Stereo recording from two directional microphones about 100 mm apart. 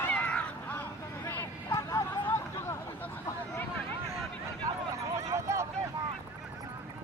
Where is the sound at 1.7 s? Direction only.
30° left (ahead or behind).